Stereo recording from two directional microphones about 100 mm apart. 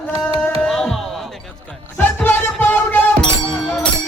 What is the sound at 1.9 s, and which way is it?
Music, 20° left (ahead or behind).